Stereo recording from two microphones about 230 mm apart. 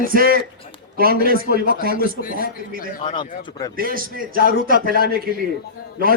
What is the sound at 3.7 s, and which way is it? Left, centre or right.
Speech, right.